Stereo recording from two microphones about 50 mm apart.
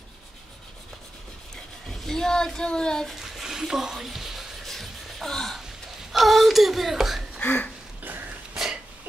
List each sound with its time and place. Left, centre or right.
1.9 s a child's voice: centre
3.2 s a sound: centre
6.1 s speech: centre
7.3 s speech: left